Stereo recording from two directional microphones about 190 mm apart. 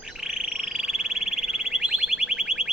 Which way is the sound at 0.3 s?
5° right (ahead or behind).